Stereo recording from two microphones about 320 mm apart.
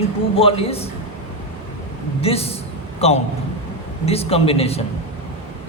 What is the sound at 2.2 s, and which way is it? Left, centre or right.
Speech, centre.